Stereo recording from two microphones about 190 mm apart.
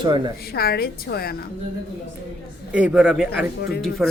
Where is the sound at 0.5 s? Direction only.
55° left (ahead or behind).